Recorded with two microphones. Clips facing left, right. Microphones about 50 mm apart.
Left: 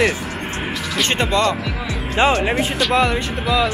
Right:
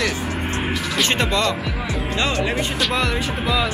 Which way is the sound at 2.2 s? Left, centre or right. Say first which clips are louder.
Left 7 dB; left.